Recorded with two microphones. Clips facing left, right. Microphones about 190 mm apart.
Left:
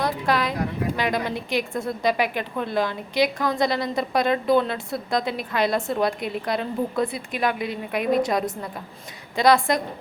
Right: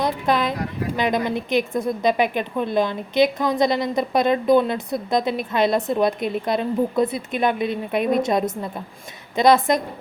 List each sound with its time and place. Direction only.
0.0 s a woman's voice: 20° right (ahead or behind)